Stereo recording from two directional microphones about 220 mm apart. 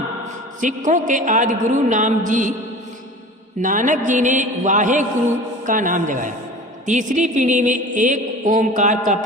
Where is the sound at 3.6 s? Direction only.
35° right (ahead or behind).